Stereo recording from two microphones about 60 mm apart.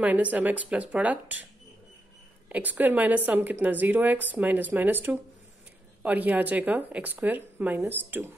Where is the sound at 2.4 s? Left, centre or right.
Right.